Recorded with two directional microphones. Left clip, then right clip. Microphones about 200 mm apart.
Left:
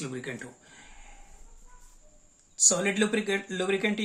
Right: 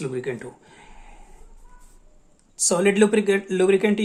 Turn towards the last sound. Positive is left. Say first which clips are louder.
# right 9 dB
turn(degrees=-40)  # may be behind; listen again after turning